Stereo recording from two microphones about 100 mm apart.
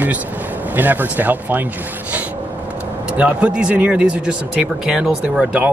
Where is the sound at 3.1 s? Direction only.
15° right (ahead or behind).